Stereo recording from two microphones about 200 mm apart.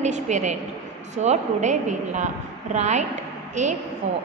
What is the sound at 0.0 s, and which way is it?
A woman's voice, 35° right (ahead or behind).